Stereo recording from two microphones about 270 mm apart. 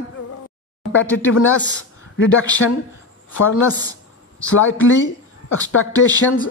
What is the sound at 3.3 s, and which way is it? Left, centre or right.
Speech, left.